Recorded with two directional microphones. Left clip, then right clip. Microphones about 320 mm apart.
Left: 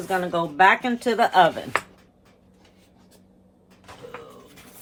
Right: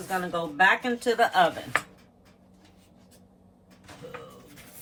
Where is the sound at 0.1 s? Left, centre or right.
Left.